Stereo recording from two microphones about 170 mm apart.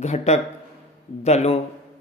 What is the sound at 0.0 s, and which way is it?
Speech, 40° left (ahead or behind).